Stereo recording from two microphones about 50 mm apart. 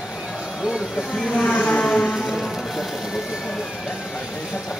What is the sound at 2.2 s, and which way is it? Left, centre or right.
Music, centre.